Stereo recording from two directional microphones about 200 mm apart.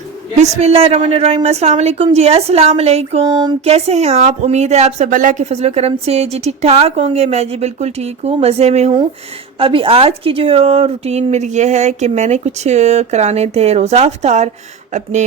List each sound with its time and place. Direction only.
0.3 s speech: 35° right (ahead or behind)
3.6 s speech: 30° right (ahead or behind)